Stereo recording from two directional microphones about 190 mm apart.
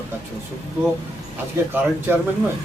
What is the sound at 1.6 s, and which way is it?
Speech, 15° right (ahead or behind).